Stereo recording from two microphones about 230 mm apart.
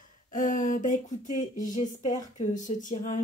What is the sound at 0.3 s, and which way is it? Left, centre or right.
Speech, left.